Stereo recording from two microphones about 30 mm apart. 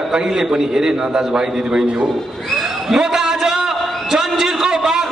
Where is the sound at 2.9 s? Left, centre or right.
Centre.